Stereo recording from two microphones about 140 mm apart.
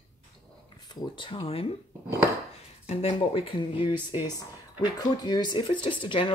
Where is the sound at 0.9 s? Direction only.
35° left (ahead or behind).